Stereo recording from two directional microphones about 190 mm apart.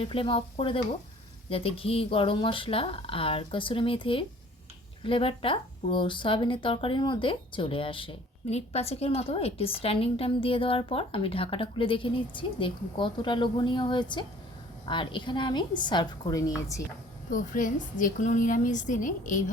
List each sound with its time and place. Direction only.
0.0 s speech: 30° left (ahead or behind)
17.3 s a woman's voice: 45° left (ahead or behind)